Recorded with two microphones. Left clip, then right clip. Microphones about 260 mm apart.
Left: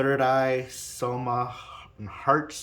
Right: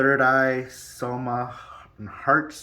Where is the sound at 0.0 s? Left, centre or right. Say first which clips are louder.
Right 4 dB; centre.